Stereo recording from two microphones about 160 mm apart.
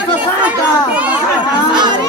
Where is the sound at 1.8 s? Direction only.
25° right (ahead or behind).